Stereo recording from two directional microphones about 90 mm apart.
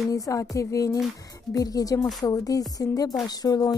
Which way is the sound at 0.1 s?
40° left (ahead or behind).